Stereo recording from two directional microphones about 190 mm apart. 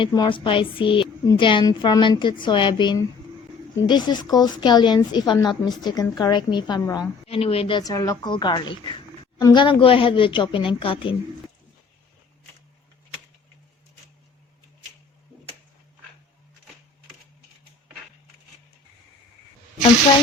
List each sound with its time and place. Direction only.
0.0 s a woman's voice: 25° left (ahead or behind)